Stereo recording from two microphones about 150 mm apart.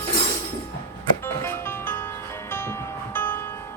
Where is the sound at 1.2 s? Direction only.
15° left (ahead or behind).